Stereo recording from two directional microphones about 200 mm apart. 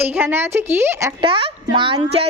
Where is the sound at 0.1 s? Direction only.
10° right (ahead or behind).